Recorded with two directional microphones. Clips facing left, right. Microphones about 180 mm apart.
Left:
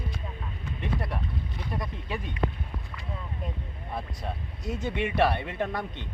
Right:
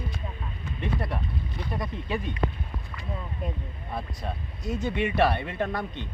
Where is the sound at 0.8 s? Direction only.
5° left (ahead or behind).